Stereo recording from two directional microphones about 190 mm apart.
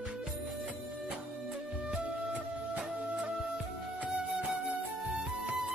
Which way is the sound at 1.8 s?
5° right (ahead or behind).